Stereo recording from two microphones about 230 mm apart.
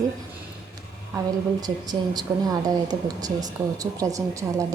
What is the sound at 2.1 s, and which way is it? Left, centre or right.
Speech, centre.